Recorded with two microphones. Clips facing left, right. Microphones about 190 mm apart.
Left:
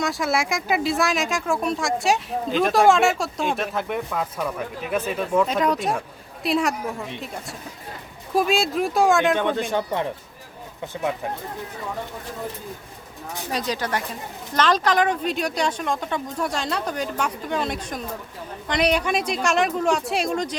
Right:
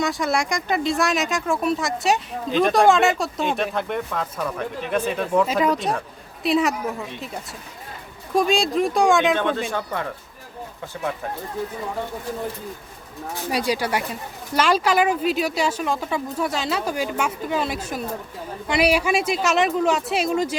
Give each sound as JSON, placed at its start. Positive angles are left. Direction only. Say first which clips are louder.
{"t": 0.0, "sound": "speech", "louder": "right 1 dB", "side_deg": 0}
{"t": 8.4, "sound": "speech", "louder": "right 1 dB", "side_deg": 5}
{"t": 9.3, "sound": "speech", "louder": "even", "side_deg": 15}
{"t": 13.5, "sound": "speech", "louder": "right 3 dB", "side_deg": -10}